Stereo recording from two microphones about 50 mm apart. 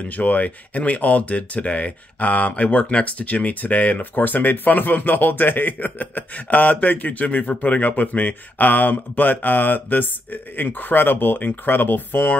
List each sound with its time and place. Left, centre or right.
0.0 s speech: left